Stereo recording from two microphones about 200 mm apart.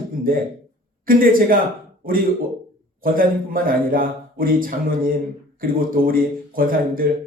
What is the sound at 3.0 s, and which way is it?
A man's voice, 45° right (ahead or behind).